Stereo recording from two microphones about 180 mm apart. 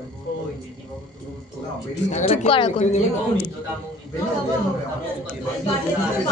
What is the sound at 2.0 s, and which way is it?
Speech, 40° left (ahead or behind).